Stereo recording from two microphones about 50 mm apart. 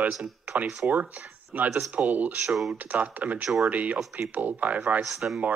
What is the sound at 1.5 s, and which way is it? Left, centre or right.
Speech, right.